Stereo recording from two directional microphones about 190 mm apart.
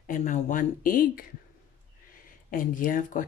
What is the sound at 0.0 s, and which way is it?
Speech, 45° left (ahead or behind).